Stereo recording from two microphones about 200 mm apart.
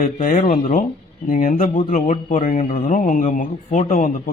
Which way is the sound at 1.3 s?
45° left (ahead or behind).